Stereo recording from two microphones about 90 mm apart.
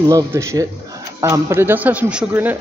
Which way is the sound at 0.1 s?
35° right (ahead or behind).